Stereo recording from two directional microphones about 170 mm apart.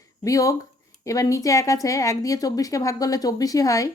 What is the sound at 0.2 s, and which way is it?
Speech, 20° left (ahead or behind).